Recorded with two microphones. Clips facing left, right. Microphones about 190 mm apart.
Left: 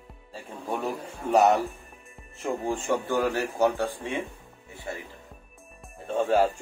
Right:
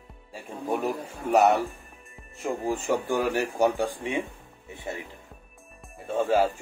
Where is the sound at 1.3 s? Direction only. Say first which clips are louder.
Even; centre (ahead or behind).